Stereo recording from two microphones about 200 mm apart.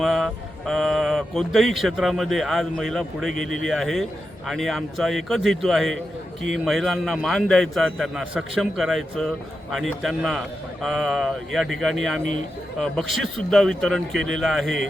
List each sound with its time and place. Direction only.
0.0 s speech: centre (ahead or behind)
3.3 s speech: 75° right (ahead or behind)
3.7 s speech: centre (ahead or behind)
14.2 s speech: 75° right (ahead or behind)
14.4 s speech: centre (ahead or behind)